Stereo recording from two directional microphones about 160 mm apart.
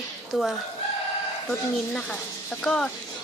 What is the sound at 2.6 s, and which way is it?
Speech, 5° left (ahead or behind).